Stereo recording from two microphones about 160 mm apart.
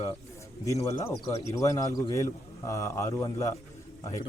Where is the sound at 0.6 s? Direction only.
20° left (ahead or behind).